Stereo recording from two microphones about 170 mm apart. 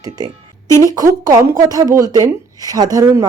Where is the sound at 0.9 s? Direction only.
20° right (ahead or behind).